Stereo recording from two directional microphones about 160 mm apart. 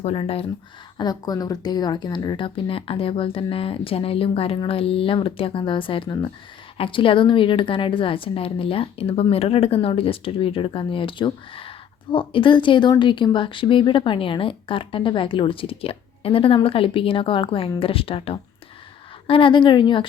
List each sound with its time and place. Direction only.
0.0 s speech: 40° left (ahead or behind)
0.9 s speech: 25° left (ahead or behind)